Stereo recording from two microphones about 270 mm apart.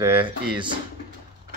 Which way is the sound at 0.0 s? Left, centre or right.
Centre.